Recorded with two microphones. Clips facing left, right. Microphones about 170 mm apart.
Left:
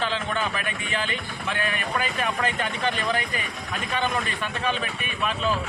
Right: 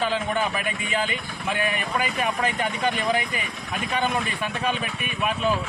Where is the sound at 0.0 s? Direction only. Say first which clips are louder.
Right 3 dB; 10° right (ahead or behind).